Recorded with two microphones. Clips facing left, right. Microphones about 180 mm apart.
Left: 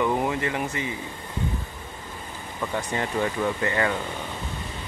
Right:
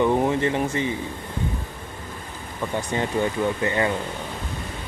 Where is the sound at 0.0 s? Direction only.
25° right (ahead or behind).